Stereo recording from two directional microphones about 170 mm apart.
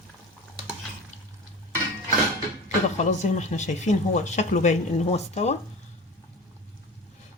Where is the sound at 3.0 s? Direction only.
45° left (ahead or behind).